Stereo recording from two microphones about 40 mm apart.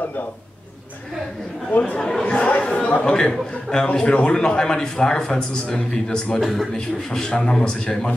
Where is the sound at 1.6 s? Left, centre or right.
Left; by 3.9 s centre.